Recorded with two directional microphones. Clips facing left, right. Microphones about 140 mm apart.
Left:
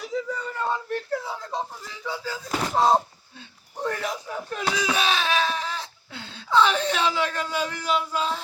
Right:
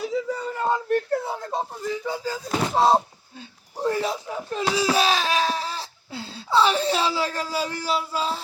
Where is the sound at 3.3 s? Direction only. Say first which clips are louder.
Right 2 dB; 30° right (ahead or behind).